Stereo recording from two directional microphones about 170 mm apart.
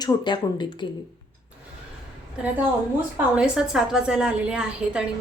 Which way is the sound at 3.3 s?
5° right (ahead or behind).